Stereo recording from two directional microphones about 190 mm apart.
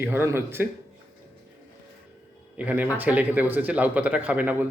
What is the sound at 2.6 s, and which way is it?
Speech, 10° right (ahead or behind).